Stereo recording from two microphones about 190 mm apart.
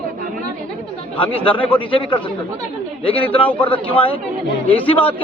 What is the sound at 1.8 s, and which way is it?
Speech, 25° left (ahead or behind).